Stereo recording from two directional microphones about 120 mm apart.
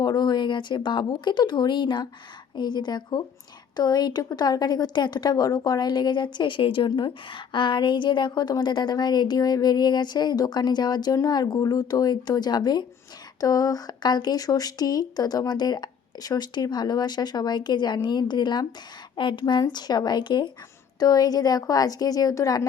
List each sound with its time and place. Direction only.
0.0 s a woman's voice: 35° left (ahead or behind)